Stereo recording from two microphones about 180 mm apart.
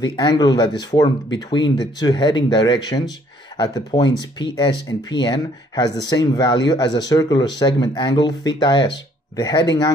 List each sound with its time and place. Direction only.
0.0 s speech: 25° left (ahead or behind)